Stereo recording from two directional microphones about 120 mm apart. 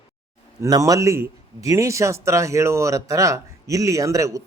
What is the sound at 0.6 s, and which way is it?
Speech, 30° right (ahead or behind).